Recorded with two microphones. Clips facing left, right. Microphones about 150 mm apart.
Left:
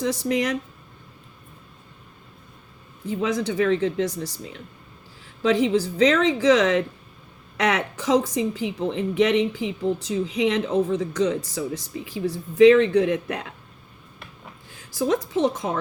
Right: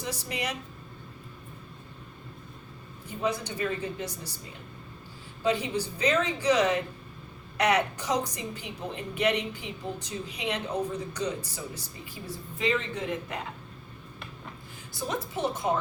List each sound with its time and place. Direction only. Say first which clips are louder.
0.0 s speech: left 11 dB; 90° left
3.1 s speech: left 7 dB; 90° left
5.4 s speech: left 8 dB; 90° left
14.8 s speech: left 10 dB; 90° left